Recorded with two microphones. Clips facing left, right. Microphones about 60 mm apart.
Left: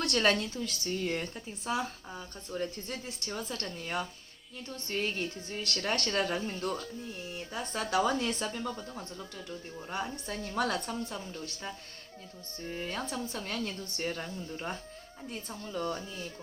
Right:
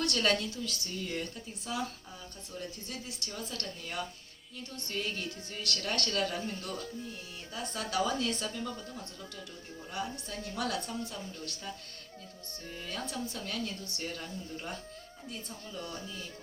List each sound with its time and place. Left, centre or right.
0.1 s a woman's voice: left
0.5 s a woman's voice: left
6.1 s speech: left
8.4 s a woman's voice: left
9.9 s a woman's voice: left